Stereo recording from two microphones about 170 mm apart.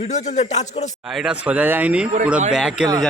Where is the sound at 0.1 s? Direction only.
40° left (ahead or behind).